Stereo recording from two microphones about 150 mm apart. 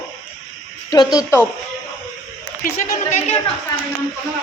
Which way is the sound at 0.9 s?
25° left (ahead or behind).